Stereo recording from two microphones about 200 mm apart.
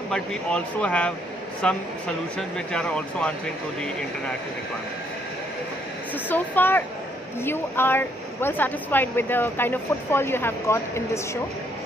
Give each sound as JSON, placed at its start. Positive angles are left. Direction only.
{"t": 0.1, "sound": "speech", "side_deg": 5}
{"t": 6.2, "sound": "speech", "side_deg": 10}